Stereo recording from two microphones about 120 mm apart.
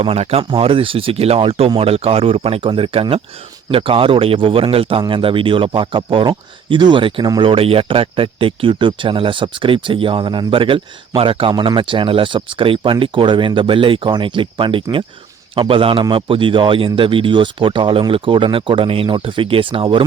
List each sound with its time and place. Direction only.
0.0 s speech: 55° right (ahead or behind)